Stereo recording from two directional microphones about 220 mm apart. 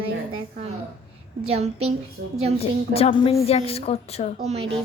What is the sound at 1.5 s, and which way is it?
Speech, 30° right (ahead or behind).